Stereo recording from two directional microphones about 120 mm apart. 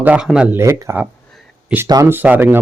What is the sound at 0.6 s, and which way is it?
Speech, 25° right (ahead or behind).